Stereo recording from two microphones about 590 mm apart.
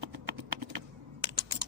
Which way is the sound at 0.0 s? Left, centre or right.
Right.